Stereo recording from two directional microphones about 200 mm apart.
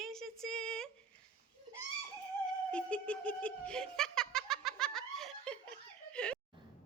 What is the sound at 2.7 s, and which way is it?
Giggle, 5° left (ahead or behind).